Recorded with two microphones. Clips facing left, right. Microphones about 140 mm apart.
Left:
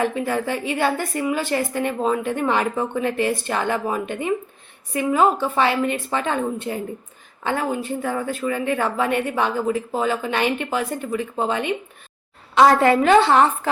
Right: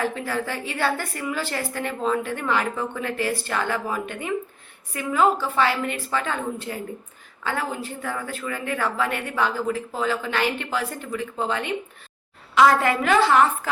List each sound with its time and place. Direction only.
0.0 s a woman's voice: 15° left (ahead or behind)
12.5 s a woman's voice: 30° left (ahead or behind)